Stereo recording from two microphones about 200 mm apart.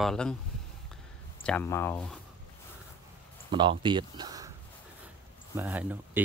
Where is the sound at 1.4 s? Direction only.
10° left (ahead or behind).